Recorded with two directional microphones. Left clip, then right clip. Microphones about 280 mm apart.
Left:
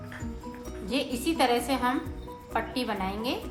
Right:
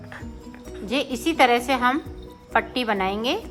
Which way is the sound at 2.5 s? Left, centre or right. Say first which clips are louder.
Right 8 dB; centre.